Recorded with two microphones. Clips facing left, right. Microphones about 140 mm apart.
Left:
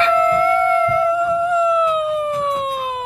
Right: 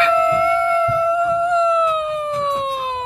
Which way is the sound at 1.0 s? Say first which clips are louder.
Even; 5° left (ahead or behind).